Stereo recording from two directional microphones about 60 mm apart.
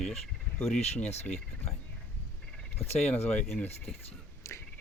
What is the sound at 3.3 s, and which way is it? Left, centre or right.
Speech, centre.